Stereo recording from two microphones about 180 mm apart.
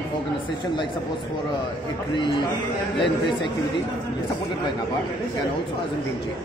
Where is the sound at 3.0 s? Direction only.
25° left (ahead or behind).